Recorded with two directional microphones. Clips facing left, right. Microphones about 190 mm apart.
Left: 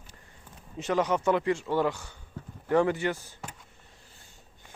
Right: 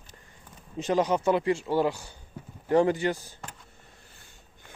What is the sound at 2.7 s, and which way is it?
Speech, 35° right (ahead or behind).